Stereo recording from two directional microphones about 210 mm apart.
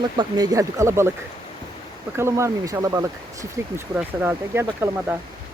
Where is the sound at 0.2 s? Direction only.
20° right (ahead or behind).